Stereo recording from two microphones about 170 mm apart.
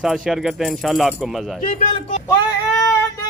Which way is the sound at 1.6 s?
50° left (ahead or behind).